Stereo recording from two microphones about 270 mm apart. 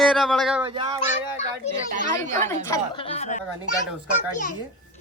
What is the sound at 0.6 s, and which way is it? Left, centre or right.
Speech, centre.